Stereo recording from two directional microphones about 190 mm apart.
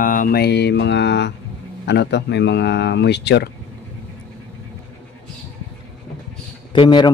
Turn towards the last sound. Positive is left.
turn(degrees=25)  # may be behind; listen again after turning